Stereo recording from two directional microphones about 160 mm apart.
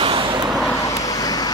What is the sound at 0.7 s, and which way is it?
Vehicle, 20° left (ahead or behind).